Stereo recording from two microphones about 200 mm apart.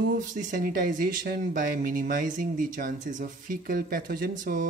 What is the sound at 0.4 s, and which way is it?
Speech, 40° right (ahead or behind).